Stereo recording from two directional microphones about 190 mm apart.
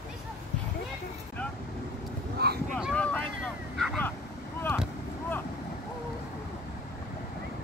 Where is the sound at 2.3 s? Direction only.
55° right (ahead or behind).